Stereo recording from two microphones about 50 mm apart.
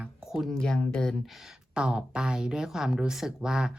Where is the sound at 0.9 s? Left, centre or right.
Centre.